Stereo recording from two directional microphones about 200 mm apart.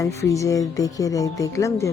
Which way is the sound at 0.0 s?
15° left (ahead or behind).